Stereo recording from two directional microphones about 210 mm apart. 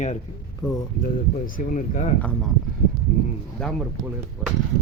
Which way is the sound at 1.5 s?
35° left (ahead or behind).